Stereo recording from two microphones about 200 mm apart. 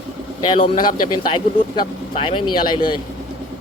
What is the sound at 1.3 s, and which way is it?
Speech, 25° left (ahead or behind).